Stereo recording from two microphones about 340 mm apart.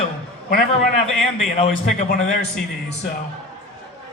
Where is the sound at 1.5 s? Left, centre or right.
Centre.